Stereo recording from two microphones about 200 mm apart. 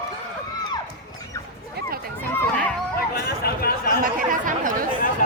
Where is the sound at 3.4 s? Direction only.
50° left (ahead or behind).